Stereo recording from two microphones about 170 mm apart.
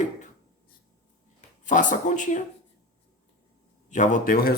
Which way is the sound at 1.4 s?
50° left (ahead or behind).